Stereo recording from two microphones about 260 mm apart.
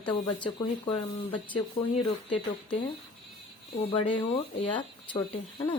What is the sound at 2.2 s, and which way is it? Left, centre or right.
Speech, centre.